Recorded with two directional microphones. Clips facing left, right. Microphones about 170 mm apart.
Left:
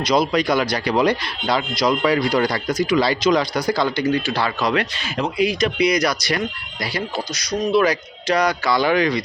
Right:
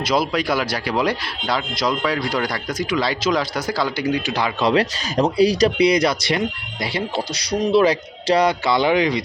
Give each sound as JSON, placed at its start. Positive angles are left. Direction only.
{"t": 0.0, "sound": "a man's voice", "side_deg": -5}
{"t": 4.7, "sound": "a man's voice", "side_deg": -35}